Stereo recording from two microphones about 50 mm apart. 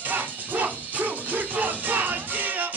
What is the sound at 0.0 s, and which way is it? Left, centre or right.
Music, right.